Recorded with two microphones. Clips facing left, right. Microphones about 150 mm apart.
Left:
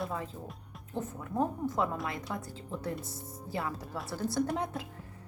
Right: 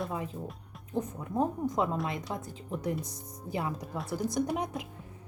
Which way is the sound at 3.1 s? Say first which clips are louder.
Left 2 dB; 5° left (ahead or behind).